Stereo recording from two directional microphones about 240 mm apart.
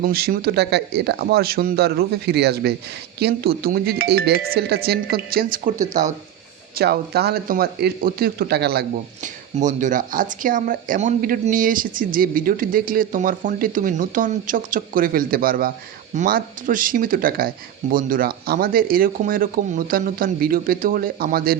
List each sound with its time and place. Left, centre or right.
0.0 s speech: right
6.7 s speech: right